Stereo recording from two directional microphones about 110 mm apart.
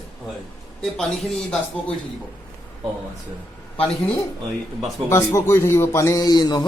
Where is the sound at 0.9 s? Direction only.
Centre (ahead or behind).